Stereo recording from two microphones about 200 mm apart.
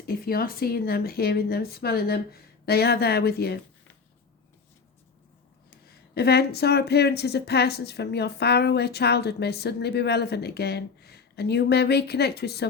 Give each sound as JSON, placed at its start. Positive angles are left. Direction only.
{"t": 0.1, "sound": "speech", "side_deg": 50}
{"t": 5.8, "sound": "speech", "side_deg": 50}